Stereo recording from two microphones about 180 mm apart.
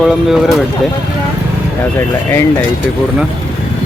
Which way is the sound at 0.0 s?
Centre (ahead or behind).